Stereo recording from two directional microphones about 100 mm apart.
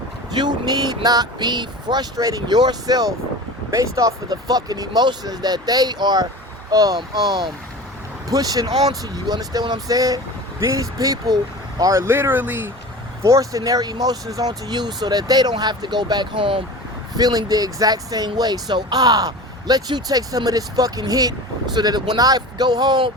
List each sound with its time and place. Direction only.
0.3 s speech: 45° right (ahead or behind); by 12.7 s 20° right (ahead or behind)
13.2 s speech: 35° right (ahead or behind); by 16.6 s 60° right (ahead or behind)
17.2 s speech: 40° right (ahead or behind)